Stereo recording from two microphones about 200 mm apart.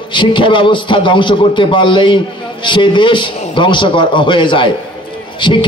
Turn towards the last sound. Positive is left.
turn(degrees=25)  # may be behind; listen again after turning